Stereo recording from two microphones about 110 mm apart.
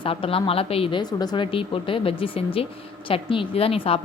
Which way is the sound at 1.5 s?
55° left (ahead or behind).